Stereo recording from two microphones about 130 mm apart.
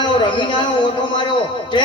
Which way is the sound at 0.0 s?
35° left (ahead or behind).